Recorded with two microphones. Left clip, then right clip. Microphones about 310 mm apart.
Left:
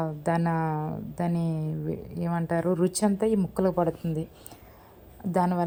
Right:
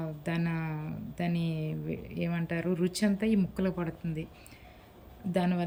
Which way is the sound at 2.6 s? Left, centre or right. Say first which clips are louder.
Left 6 dB; left.